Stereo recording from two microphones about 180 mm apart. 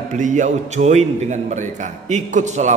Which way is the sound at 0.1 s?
45° right (ahead or behind).